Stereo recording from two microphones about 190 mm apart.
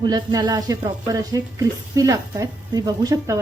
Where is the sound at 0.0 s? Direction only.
20° right (ahead or behind).